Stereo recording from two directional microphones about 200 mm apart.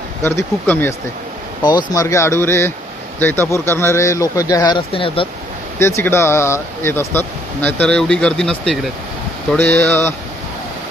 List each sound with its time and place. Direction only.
0.2 s speech: 10° left (ahead or behind); by 5.3 s 25° left (ahead or behind)
5.8 s speech: 15° left (ahead or behind)